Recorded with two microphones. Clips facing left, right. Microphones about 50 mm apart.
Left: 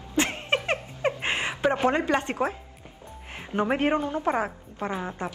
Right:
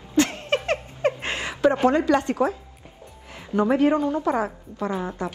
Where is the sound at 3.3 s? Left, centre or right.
Left.